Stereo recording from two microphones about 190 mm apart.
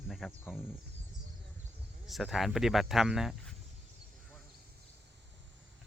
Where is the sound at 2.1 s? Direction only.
Centre (ahead or behind).